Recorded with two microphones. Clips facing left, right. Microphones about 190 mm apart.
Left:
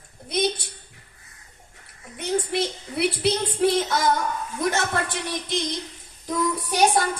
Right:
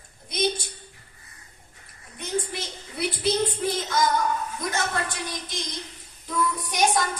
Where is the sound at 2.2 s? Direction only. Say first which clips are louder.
Left 6 dB; 70° left (ahead or behind).